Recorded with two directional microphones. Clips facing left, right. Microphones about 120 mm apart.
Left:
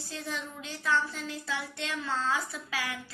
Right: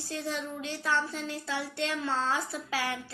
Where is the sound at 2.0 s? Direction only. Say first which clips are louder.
Left 2 dB; 35° right (ahead or behind).